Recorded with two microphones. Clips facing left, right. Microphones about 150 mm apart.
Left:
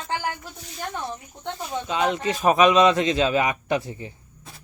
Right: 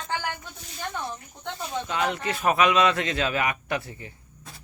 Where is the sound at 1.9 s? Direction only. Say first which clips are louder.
Left 5 dB; 20° left (ahead or behind).